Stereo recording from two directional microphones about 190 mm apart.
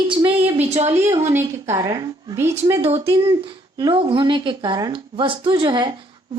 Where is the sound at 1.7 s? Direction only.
20° right (ahead or behind).